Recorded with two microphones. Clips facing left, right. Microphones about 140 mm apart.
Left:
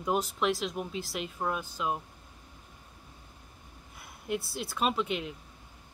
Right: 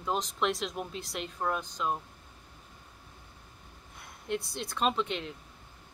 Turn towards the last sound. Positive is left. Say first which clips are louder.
# even
turn(degrees=5)  # may be behind; listen again after turning